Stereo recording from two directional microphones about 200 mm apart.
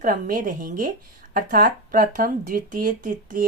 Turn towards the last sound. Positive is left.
turn(degrees=-40)  # may be behind; listen again after turning